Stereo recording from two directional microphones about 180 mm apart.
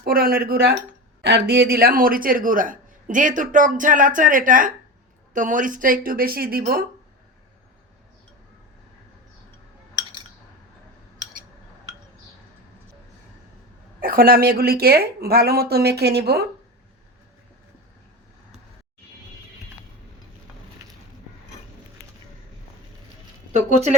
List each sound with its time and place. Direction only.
0.0 s a woman's voice: 55° right (ahead or behind)
14.0 s a woman's voice: 55° right (ahead or behind)